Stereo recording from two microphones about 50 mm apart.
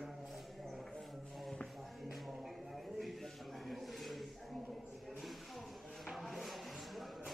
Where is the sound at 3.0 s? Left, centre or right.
Centre.